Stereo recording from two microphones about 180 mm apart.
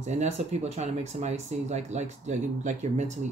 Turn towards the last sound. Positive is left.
turn(degrees=-40)  # may be behind; listen again after turning